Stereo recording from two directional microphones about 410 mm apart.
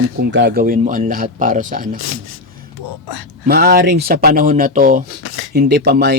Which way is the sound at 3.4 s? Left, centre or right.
Right.